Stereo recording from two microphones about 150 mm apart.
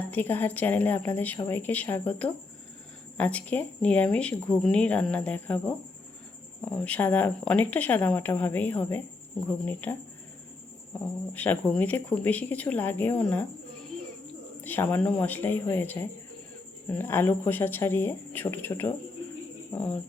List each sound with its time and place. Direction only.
0.1 s a woman's voice: 15° left (ahead or behind)
11.3 s a woman's voice: 10° left (ahead or behind)